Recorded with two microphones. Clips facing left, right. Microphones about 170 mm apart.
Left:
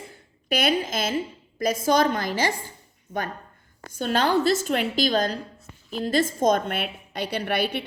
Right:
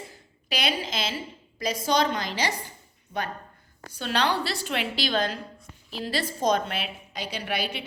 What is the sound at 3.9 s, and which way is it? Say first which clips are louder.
A woman's voice: left 4 dB; 45° left (ahead or behind).